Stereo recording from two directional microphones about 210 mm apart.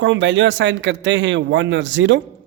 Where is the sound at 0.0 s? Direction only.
60° right (ahead or behind).